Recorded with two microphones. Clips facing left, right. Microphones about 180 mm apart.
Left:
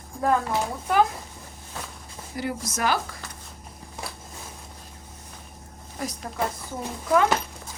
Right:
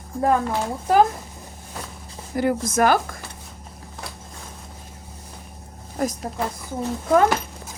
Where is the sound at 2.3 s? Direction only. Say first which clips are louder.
Right 9 dB; 55° right (ahead or behind).